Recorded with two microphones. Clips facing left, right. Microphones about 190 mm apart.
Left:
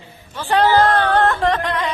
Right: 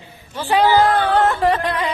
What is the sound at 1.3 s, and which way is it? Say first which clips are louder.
Music: right 1 dB; 10° right (ahead or behind).